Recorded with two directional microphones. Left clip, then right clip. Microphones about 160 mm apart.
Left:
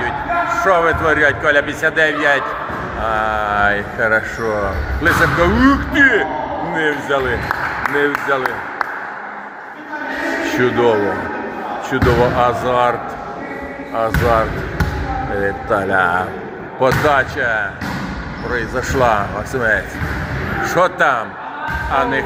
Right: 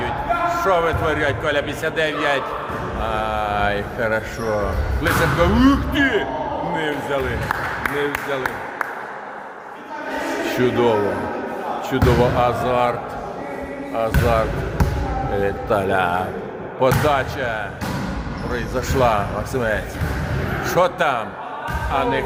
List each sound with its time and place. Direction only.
0.5 s a man's voice: 10° right (ahead or behind)
10.6 s a man's voice: 15° right (ahead or behind)
13.9 s speech: centre (ahead or behind)
15.7 s a man's voice: 20° right (ahead or behind)